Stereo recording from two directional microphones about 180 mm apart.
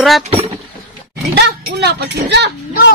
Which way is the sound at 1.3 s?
65° right (ahead or behind).